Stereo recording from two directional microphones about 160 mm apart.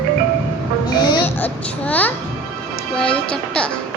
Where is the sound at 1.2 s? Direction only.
10° left (ahead or behind).